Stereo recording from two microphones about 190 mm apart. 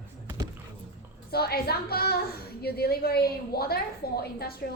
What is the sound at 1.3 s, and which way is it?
A woman's voice, 55° left (ahead or behind).